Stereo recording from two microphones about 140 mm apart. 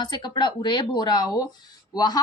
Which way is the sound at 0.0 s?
30° left (ahead or behind).